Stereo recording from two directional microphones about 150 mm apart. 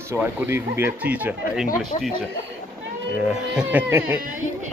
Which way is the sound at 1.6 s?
65° left (ahead or behind).